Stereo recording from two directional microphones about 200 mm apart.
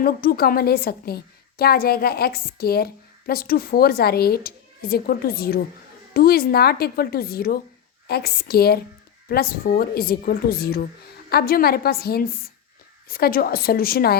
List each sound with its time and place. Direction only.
0.0 s a woman's voice: 45° left (ahead or behind)